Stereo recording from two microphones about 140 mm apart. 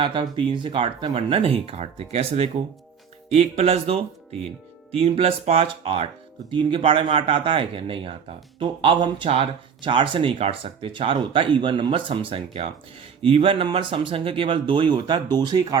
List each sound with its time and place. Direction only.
0.0 s speech: 40° right (ahead or behind)